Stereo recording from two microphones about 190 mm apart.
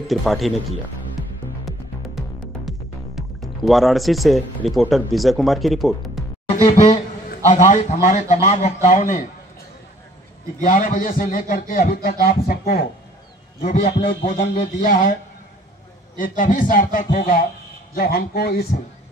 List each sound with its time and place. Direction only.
0.1 s speech: centre (ahead or behind)
1.7 s music: centre (ahead or behind)
3.2 s speech: centre (ahead or behind)
6.5 s a man's voice: 35° left (ahead or behind)
10.6 s a man's voice: 45° left (ahead or behind)
16.2 s a man's voice: 45° left (ahead or behind)